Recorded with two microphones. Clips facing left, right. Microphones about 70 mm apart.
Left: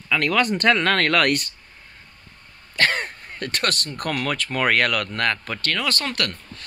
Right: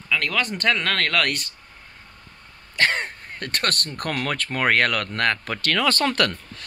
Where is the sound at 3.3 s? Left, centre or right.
Right.